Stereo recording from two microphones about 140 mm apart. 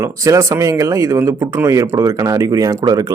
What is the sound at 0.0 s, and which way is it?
A man's voice, 20° right (ahead or behind).